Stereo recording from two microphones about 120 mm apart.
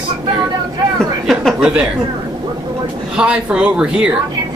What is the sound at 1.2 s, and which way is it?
Speech, 5° right (ahead or behind).